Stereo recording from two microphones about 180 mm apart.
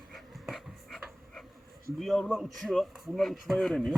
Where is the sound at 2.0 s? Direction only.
Centre (ahead or behind).